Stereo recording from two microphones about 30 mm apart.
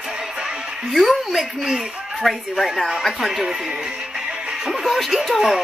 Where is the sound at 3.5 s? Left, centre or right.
Right.